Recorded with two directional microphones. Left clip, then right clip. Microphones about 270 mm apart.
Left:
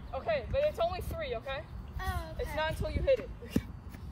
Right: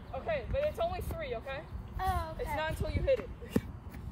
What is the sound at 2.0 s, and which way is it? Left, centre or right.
Speech, right.